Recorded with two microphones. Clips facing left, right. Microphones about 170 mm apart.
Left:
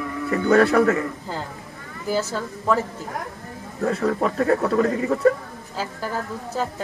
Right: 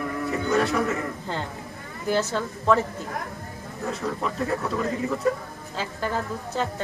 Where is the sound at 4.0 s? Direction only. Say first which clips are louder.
Left 6 dB; 60° left (ahead or behind).